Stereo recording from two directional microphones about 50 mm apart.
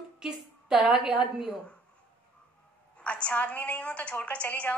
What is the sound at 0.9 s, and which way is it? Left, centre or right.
Speech, centre.